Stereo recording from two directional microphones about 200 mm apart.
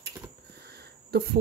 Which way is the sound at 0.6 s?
55° right (ahead or behind).